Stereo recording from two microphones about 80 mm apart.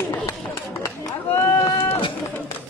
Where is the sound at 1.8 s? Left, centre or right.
Left.